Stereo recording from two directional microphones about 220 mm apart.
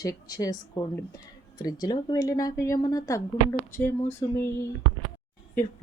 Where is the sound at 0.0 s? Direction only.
15° left (ahead or behind).